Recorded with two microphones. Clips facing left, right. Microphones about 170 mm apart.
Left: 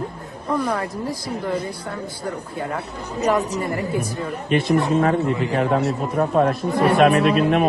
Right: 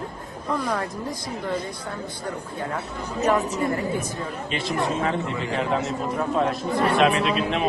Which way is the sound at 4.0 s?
60° left (ahead or behind).